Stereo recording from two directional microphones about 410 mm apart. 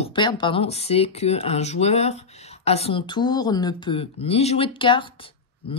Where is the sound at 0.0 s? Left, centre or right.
Centre.